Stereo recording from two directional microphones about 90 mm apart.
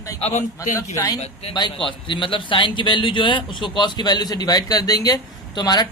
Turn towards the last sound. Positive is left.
turn(degrees=50)  # may be behind; listen again after turning